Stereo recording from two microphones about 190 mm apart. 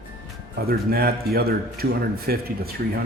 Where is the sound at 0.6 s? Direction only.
55° right (ahead or behind).